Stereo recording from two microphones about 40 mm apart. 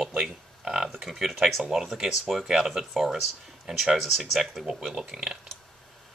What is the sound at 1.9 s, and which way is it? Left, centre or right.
Speech, centre.